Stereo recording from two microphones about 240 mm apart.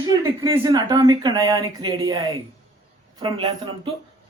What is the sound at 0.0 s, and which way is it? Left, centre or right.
Speech, centre.